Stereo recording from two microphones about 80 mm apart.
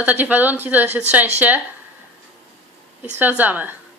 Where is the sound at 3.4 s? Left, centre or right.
Right.